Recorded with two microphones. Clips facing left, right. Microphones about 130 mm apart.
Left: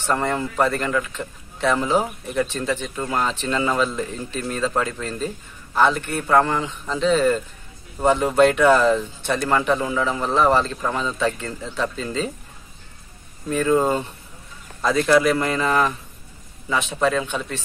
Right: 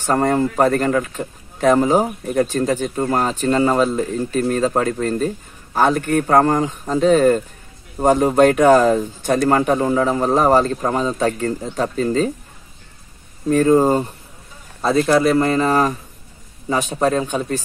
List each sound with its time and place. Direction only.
0.0 s speech: 40° right (ahead or behind)
13.5 s speech: 40° right (ahead or behind)